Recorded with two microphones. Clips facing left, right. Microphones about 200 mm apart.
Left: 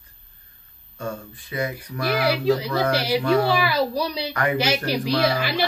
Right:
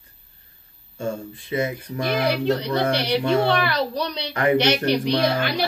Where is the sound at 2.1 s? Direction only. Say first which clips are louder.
Left 1 dB; 5° left (ahead or behind).